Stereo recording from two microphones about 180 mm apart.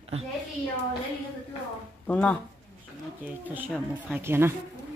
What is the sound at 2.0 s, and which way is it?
Speech, 5° left (ahead or behind).